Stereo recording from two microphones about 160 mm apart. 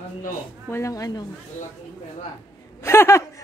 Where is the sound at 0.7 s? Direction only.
20° left (ahead or behind).